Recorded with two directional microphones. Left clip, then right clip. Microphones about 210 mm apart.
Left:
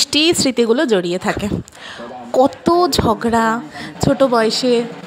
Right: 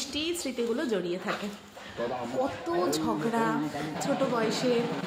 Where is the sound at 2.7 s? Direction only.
45° left (ahead or behind).